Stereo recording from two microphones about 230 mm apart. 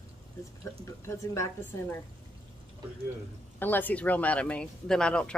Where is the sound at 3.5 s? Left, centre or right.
Centre.